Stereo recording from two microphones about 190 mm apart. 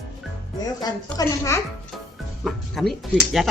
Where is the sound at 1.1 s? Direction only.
15° left (ahead or behind).